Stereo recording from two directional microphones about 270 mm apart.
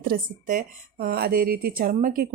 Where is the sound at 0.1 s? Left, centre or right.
Right.